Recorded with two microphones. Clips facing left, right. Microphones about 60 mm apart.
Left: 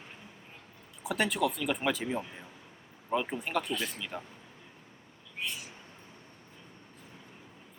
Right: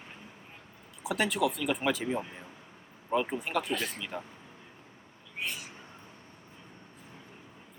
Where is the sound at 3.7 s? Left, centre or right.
Right.